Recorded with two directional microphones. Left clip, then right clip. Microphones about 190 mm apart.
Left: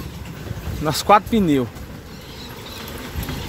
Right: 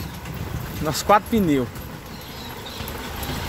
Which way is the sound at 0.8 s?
20° left (ahead or behind).